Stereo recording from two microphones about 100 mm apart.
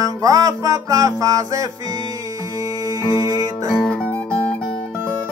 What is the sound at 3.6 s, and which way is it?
Music, 5° left (ahead or behind).